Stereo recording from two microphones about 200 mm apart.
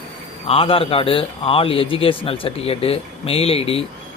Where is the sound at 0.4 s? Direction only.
25° left (ahead or behind).